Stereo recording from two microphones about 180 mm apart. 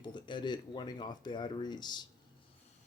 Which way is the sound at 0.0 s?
25° left (ahead or behind).